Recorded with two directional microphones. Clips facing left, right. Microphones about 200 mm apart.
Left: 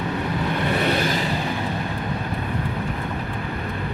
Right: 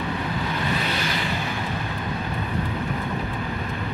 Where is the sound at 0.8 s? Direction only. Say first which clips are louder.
Left 5 dB; 50° left (ahead or behind).